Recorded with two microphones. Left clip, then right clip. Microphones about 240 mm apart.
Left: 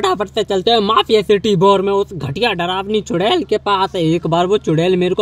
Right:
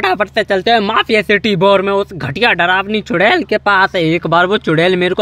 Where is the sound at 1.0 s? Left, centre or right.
Right.